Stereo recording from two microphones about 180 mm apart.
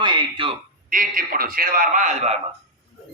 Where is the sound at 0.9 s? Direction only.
50° right (ahead or behind).